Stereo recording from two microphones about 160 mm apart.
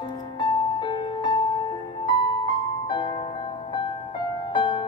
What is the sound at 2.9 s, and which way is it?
Music, 30° left (ahead or behind).